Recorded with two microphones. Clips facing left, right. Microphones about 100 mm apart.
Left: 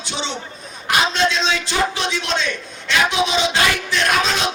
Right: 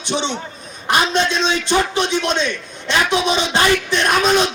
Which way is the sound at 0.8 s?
20° right (ahead or behind).